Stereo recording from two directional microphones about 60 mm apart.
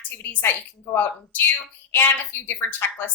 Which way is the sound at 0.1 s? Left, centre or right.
Left.